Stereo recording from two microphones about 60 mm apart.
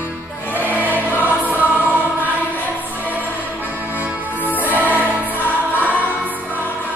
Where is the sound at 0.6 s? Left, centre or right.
Left.